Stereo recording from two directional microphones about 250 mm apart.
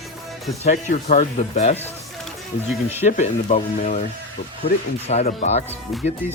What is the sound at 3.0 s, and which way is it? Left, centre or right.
Speech, left.